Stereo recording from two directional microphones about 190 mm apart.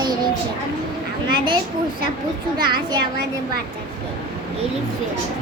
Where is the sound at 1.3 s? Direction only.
25° right (ahead or behind).